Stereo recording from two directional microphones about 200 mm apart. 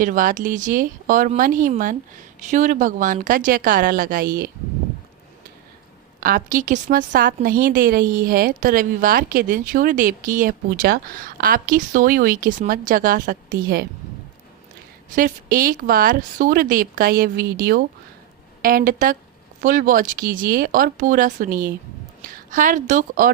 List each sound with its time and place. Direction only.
0.0 s a woman's voice: 40° right (ahead or behind)
6.1 s a woman's voice: 45° right (ahead or behind)
15.1 s a woman's voice: 45° right (ahead or behind)